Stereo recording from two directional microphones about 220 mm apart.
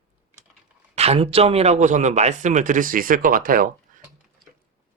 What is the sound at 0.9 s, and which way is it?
A man's voice, 30° right (ahead or behind).